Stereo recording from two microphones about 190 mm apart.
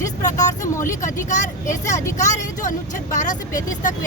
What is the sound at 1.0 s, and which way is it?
Speech, 40° left (ahead or behind).